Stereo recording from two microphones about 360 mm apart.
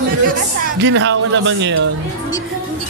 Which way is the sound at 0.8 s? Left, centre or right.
Right.